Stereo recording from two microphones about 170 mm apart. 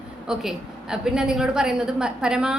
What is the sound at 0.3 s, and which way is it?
A woman's voice, 5° right (ahead or behind).